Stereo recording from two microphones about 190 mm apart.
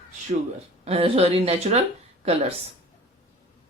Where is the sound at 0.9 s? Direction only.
35° right (ahead or behind).